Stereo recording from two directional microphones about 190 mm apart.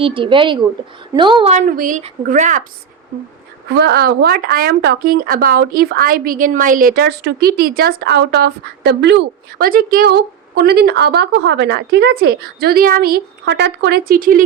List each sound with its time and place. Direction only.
0.0 s speech: 25° right (ahead or behind)
1.5 s speech: 45° right (ahead or behind)
3.8 s speech: 60° right (ahead or behind)